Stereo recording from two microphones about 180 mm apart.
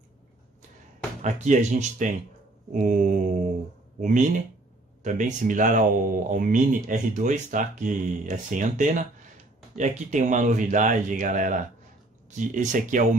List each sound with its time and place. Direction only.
1.2 s speech: 40° right (ahead or behind)